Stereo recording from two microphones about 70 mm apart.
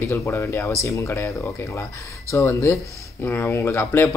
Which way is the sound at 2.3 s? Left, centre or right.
Left.